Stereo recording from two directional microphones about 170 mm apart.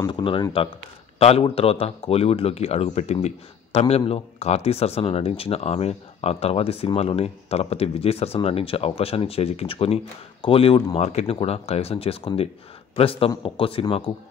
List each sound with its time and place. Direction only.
0.0 s speech: 30° left (ahead or behind)